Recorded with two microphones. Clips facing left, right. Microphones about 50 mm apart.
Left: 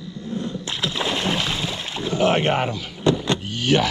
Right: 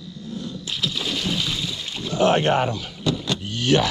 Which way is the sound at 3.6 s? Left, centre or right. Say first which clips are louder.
Right 1 dB; left.